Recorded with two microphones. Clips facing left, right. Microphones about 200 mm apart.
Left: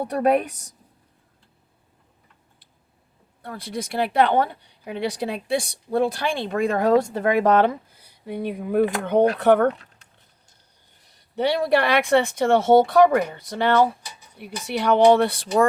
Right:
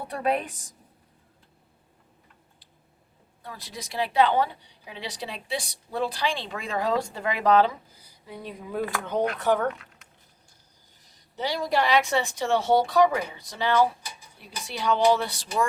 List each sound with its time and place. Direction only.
0.0 s speech: 45° left (ahead or behind)
3.4 s a woman's voice: 55° left (ahead or behind)
11.0 s a woman's voice: 60° left (ahead or behind)